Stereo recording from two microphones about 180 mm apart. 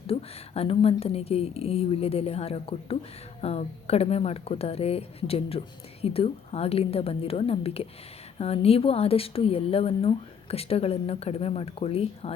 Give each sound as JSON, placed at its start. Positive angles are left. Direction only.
{"t": 0.1, "sound": "speech", "side_deg": 35}